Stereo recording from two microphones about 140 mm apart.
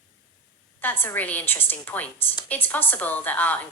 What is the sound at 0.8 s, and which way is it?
A woman's voice, 15° left (ahead or behind).